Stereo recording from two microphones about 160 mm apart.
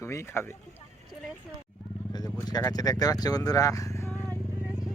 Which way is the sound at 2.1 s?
25° left (ahead or behind).